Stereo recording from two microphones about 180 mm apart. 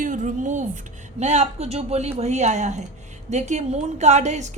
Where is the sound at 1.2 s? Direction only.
40° right (ahead or behind).